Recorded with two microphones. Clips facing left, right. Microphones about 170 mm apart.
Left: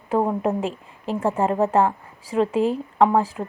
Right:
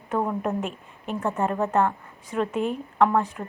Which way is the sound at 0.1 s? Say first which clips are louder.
Left 4 dB; 30° left (ahead or behind).